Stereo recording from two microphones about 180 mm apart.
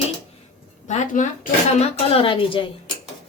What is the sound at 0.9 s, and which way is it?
Speech, 45° left (ahead or behind).